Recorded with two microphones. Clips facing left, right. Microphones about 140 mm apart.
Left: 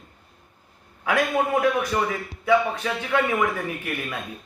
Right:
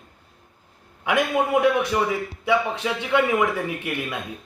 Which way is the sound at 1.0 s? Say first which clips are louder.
Right 1 dB; 15° right (ahead or behind).